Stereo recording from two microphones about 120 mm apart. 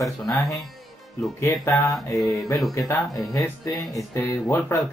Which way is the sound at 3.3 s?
25° left (ahead or behind).